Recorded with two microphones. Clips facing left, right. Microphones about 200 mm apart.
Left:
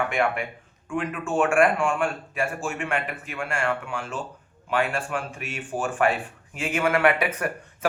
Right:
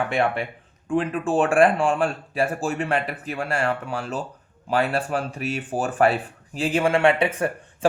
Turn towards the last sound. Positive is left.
turn(degrees=-30)  # may be behind; listen again after turning